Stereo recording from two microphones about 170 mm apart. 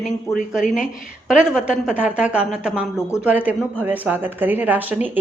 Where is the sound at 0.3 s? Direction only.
15° left (ahead or behind).